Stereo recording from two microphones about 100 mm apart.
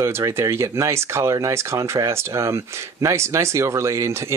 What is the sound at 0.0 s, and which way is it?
Speech, 25° right (ahead or behind).